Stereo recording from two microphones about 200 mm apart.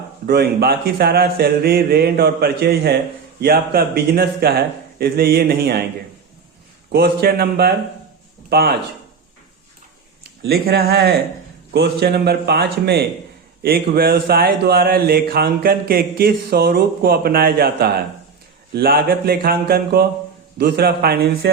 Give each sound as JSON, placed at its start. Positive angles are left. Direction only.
{"t": 0.3, "sound": "speech", "side_deg": -55}
{"t": 6.9, "sound": "speech", "side_deg": -50}
{"t": 10.4, "sound": "speech", "side_deg": -50}